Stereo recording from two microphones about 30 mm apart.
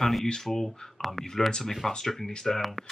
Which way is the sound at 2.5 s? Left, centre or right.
Centre.